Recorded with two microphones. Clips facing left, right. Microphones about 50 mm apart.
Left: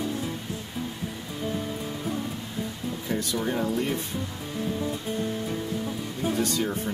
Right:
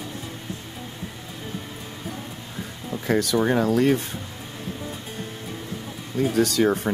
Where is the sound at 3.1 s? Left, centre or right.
Right.